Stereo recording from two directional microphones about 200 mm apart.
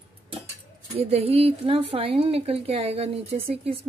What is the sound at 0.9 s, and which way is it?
A woman's voice, 30° right (ahead or behind).